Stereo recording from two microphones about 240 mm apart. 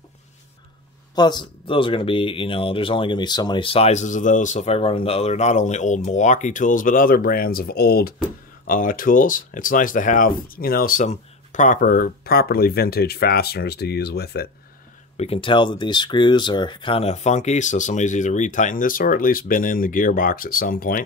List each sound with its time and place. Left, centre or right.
1.1 s speech: centre; by 14.5 s left
15.1 s speech: left